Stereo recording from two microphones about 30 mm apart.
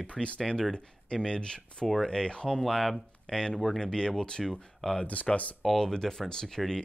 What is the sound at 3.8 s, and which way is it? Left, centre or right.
Speech, left.